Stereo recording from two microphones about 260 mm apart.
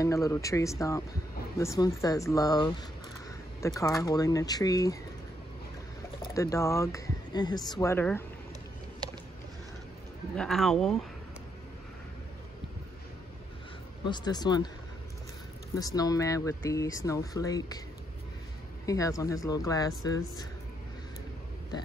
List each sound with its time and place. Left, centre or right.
0.0 s speech: centre
6.2 s speech: centre
9.0 s boat: centre
10.3 s speech: centre
14.0 s speech: centre
15.7 s speech: centre
18.9 s speech: centre